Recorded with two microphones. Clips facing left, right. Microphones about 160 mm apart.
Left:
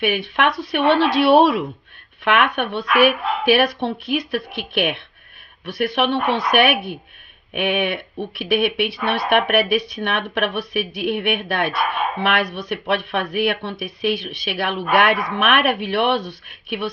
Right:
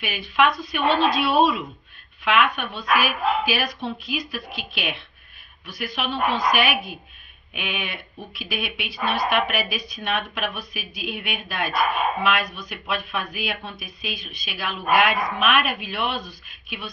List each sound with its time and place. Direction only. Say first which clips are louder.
0.0 s speech: left 2 dB; 65° left (ahead or behind)